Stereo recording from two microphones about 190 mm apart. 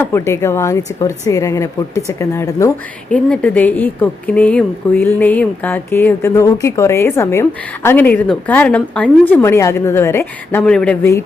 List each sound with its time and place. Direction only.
0.0 s speech: 15° left (ahead or behind)